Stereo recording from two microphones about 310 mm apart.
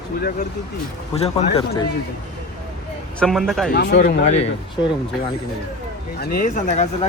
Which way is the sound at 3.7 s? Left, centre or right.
Left.